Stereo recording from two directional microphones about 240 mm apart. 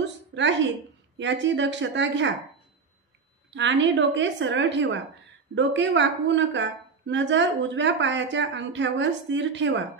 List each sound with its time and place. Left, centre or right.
0.0 s a sound: right
1.1 s a woman's voice: right
3.5 s a woman's voice: right